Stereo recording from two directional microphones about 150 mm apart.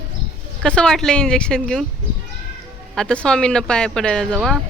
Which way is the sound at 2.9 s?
5° left (ahead or behind).